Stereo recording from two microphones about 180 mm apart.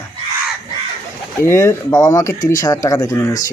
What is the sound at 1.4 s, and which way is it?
Speech, 15° left (ahead or behind).